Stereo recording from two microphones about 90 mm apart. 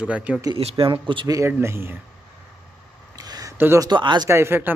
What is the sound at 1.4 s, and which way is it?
Speech, 25° right (ahead or behind).